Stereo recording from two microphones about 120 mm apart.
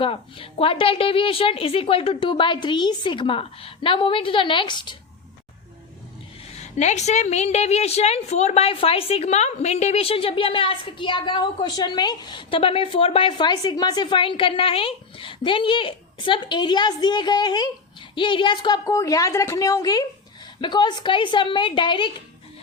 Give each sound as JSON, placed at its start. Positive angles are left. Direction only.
{"t": 0.0, "sound": "a woman's voice", "side_deg": 50}
{"t": 6.6, "sound": "a woman's voice", "side_deg": 70}